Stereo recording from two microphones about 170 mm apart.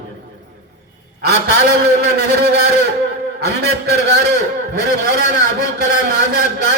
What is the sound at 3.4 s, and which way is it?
A man's voice, 70° right (ahead or behind).